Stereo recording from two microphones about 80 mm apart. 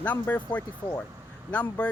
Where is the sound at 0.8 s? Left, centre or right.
Left.